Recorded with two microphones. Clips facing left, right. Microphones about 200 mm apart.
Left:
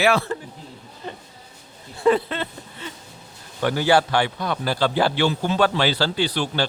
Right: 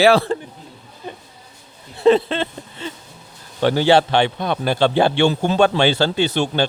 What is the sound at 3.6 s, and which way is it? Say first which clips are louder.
A man's voice: right 4 dB; 30° right (ahead or behind).